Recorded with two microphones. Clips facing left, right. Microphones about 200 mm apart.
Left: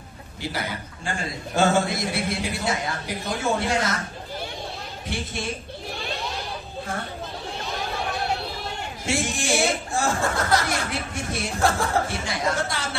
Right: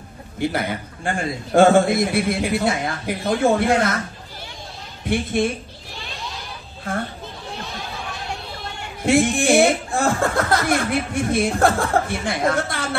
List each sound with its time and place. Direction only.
0.4 s a man's voice: 55° right (ahead or behind)
5.0 s a man's voice: 55° right (ahead or behind)
6.9 s a man's voice: 55° right (ahead or behind)
9.0 s a man's voice: 55° right (ahead or behind)